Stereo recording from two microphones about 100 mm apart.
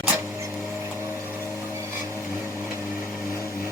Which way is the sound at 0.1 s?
25° right (ahead or behind).